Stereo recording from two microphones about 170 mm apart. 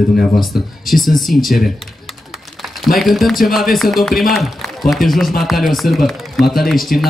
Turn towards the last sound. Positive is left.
turn(degrees=0)  # may be behind; listen again after turning